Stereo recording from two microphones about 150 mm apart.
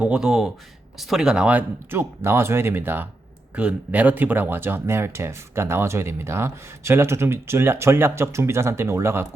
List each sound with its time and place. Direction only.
0.0 s speech: 5° right (ahead or behind)